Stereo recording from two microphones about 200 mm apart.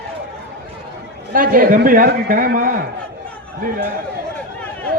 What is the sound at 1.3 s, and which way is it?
A man's voice, 45° right (ahead or behind).